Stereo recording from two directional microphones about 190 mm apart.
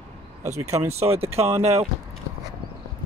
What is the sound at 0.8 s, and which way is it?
Speech, 35° right (ahead or behind).